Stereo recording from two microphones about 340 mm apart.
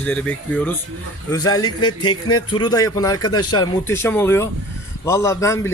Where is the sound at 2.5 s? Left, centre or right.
Centre.